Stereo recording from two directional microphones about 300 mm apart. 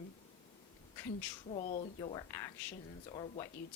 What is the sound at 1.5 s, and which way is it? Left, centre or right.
Speech, left.